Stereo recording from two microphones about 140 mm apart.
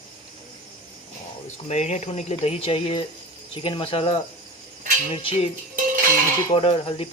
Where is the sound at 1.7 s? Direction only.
55° left (ahead or behind).